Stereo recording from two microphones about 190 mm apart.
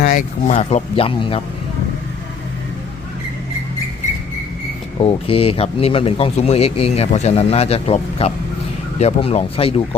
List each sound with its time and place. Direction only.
0.0 s speech: 45° left (ahead or behind); by 1.4 s 30° left (ahead or behind)
4.9 s speech: 30° left (ahead or behind)